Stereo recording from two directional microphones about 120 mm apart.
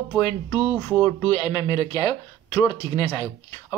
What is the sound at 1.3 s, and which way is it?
Speech, 35° left (ahead or behind).